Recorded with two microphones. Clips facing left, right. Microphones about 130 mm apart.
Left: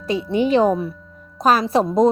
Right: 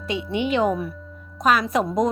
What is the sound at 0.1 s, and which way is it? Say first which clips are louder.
A woman's voice: left 6 dB; 40° left (ahead or behind).